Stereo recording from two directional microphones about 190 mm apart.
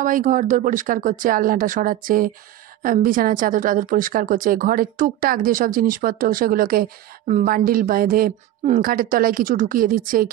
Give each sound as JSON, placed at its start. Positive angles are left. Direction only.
{"t": 0.0, "sound": "a woman's voice", "side_deg": -45}